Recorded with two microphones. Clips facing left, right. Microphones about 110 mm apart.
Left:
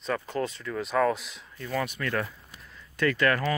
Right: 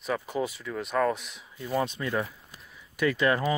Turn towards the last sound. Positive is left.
turn(degrees=-15)  # may be behind; listen again after turning